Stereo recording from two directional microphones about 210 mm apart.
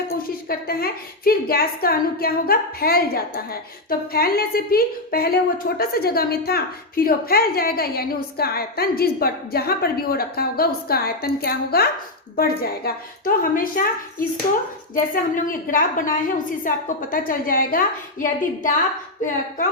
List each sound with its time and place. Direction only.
0.4 s a woman's voice: 45° left (ahead or behind)
14.9 s a woman's voice: 40° left (ahead or behind)